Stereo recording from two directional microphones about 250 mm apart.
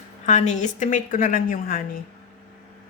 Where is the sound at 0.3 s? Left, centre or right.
Left.